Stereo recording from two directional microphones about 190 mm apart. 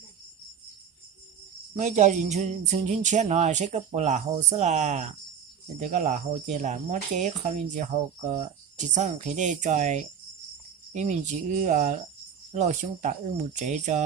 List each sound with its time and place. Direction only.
1.8 s speech: 40° right (ahead or behind)